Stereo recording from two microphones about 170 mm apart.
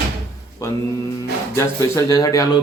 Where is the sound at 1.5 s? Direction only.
15° left (ahead or behind).